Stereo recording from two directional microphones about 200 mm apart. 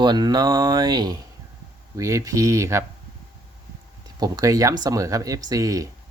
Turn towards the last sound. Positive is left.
turn(degrees=-15)  # may be behind; listen again after turning